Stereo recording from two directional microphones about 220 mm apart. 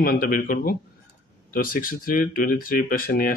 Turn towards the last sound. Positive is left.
turn(degrees=40)  # may be behind; listen again after turning